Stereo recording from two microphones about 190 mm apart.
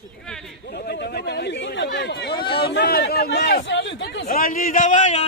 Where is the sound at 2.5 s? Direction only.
55° left (ahead or behind); by 4.2 s 75° left (ahead or behind).